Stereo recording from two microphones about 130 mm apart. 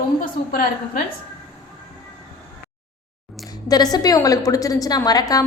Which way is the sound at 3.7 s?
30° left (ahead or behind).